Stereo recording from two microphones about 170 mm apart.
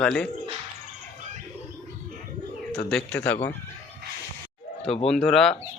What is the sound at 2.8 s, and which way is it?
Speech, 5° left (ahead or behind).